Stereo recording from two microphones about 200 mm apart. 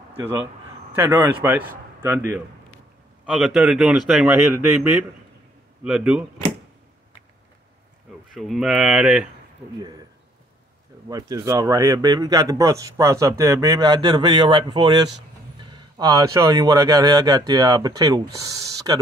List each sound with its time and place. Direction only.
0.2 s a man's voice: 10° right (ahead or behind)
3.3 s speech: centre (ahead or behind)
5.9 s speech: 5° right (ahead or behind)
8.4 s speech: centre (ahead or behind)
11.1 s speech: 20° right (ahead or behind)